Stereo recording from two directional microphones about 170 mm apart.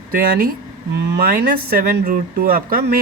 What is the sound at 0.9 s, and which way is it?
Speech, 70° right (ahead or behind).